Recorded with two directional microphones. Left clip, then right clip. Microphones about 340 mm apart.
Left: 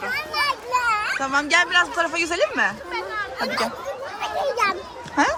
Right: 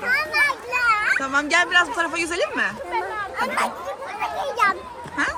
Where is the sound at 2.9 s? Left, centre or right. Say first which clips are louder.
Right 2 dB; centre.